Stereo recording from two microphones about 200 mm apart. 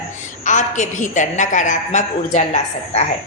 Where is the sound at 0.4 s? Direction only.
40° left (ahead or behind).